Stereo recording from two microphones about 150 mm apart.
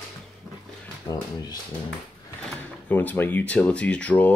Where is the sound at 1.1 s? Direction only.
30° left (ahead or behind).